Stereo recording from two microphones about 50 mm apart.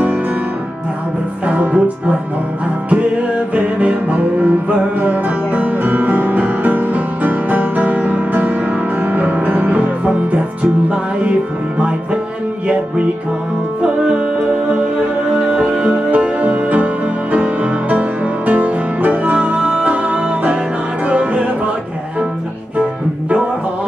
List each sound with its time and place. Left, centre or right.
1.4 s music: right
12.6 s music: right
15.8 s music: right